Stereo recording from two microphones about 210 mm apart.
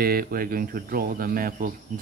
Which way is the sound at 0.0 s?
45° right (ahead or behind).